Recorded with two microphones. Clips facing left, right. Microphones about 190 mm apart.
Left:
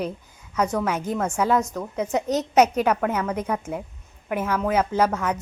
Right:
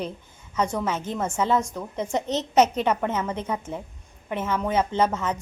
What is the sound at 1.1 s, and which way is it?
Speech, 10° right (ahead or behind).